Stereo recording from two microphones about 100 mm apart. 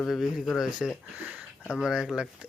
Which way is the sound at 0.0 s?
5° right (ahead or behind).